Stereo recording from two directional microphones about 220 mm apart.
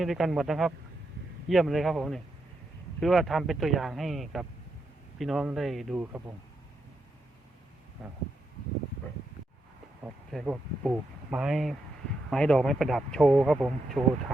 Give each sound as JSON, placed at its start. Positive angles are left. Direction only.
{"t": 0.0, "sound": "a man's voice", "side_deg": 0}
{"t": 8.0, "sound": "a man's voice", "side_deg": -5}
{"t": 10.0, "sound": "a man's voice", "side_deg": -5}